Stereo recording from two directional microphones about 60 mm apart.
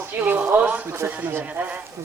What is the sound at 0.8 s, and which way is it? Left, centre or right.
Speech, right.